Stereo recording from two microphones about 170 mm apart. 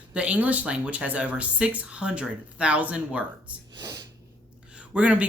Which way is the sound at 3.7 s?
25° right (ahead or behind).